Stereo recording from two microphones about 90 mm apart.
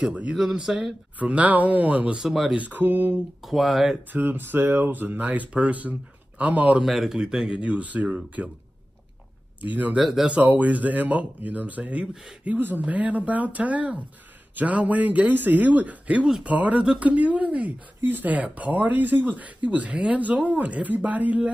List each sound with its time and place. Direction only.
0.0 s speech: 15° right (ahead or behind)
1.2 s speech: 15° right (ahead or behind)
2.5 s speech: 20° right (ahead or behind)
3.4 s speech: centre (ahead or behind)
4.1 s speech: 20° right (ahead or behind)
6.8 s speech: 5° right (ahead or behind)
9.6 s speech: 20° right (ahead or behind)
10.0 s speech: 5° right (ahead or behind)
10.3 s speech: 20° right (ahead or behind)